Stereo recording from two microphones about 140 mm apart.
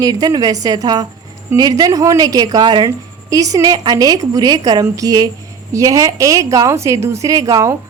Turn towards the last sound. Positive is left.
turn(degrees=-25)  # may be behind; listen again after turning